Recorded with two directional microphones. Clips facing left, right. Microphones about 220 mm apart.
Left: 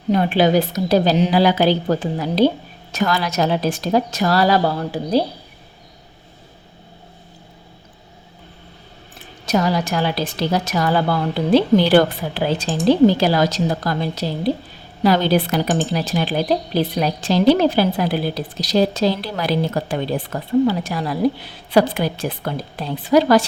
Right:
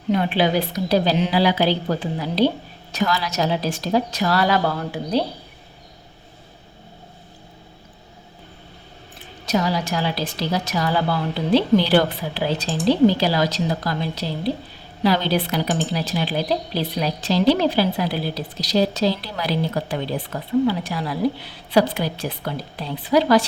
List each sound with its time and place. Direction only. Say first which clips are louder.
0.1 s a woman's voice: left 4 dB; 45° left (ahead or behind)
9.5 s a woman's voice: left 3 dB; 50° left (ahead or behind)